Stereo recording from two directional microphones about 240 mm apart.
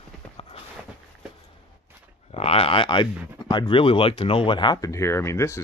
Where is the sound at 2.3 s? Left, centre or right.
Left.